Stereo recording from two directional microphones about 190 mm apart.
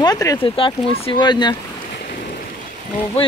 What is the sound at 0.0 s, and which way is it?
Speech, 20° left (ahead or behind).